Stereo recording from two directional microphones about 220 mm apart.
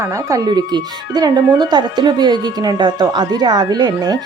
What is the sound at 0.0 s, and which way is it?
Speech, 15° right (ahead or behind).